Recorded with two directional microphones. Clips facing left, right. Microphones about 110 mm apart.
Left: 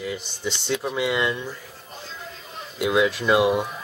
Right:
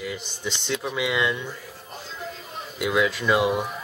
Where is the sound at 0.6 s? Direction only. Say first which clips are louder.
Left 2 dB; 10° left (ahead or behind).